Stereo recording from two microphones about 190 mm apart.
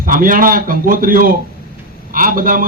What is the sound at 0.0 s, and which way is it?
A man's voice, 45° right (ahead or behind).